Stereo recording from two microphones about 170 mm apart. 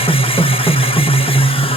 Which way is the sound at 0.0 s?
35° left (ahead or behind).